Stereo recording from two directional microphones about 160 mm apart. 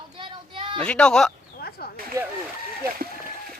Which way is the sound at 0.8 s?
5° left (ahead or behind).